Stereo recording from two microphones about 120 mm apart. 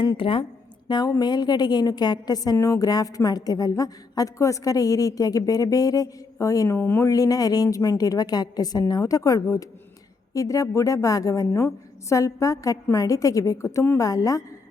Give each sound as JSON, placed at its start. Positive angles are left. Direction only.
{"t": 0.2, "sound": "speech", "side_deg": 50}
{"t": 0.9, "sound": "a woman's voice", "side_deg": 35}
{"t": 7.1, "sound": "a woman's voice", "side_deg": 30}